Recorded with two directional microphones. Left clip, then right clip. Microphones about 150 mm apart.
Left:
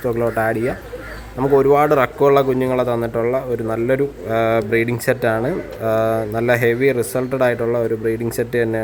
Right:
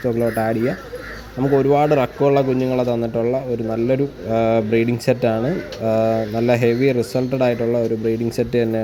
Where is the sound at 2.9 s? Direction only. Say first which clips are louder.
Left 1 dB; 30° right (ahead or behind).